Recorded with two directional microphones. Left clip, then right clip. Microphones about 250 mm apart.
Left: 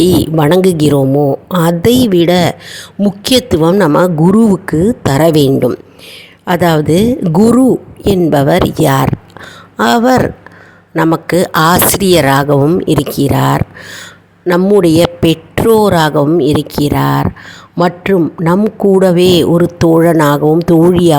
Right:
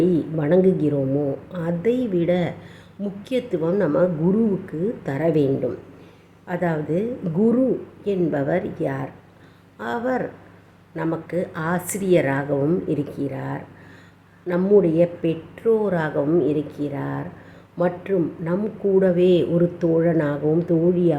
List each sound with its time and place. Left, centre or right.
0.0 s a woman's voice: left